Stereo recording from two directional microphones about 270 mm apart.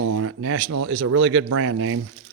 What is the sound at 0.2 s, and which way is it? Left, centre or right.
Speech, right.